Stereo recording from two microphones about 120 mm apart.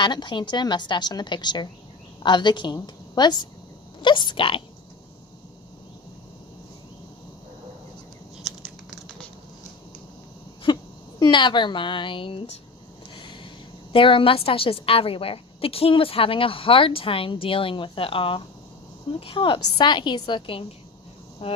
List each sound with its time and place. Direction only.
0.0 s a woman's voice: 40° left (ahead or behind)
8.4 s tearing: centre (ahead or behind)
10.7 s a sound: 40° left (ahead or behind)
11.2 s a woman's voice: 40° left (ahead or behind)
13.1 s a sound: 40° left (ahead or behind)
13.9 s a woman's voice: 45° left (ahead or behind)